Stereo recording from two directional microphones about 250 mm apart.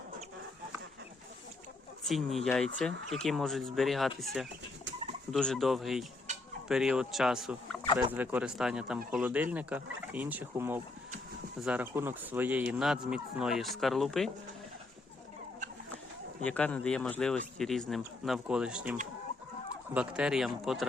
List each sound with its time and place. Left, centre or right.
2.0 s a man's voice: centre
6.3 s a sound: right
6.7 s a man's voice: centre
16.4 s a man's voice: centre